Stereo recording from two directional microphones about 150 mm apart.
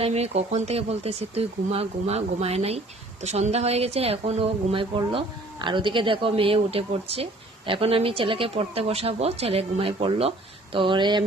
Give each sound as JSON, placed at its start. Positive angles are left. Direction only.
{"t": 0.0, "sound": "a woman's voice", "side_deg": -45}